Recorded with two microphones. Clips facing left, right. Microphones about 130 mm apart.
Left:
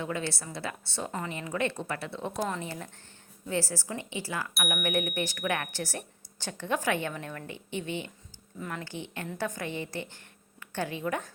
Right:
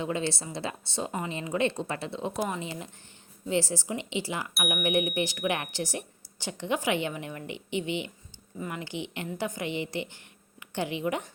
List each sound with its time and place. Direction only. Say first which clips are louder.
0.0 s a woman's voice: right 3 dB; 25° right (ahead or behind)